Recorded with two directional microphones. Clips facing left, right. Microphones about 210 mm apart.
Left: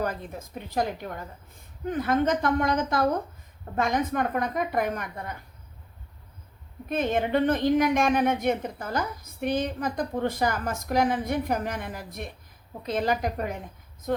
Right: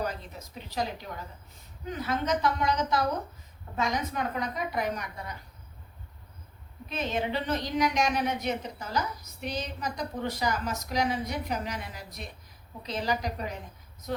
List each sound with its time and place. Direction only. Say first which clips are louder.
0.0 s a woman's voice: left 4 dB; 50° left (ahead or behind)
6.8 s a woman's voice: left 5 dB; 55° left (ahead or behind)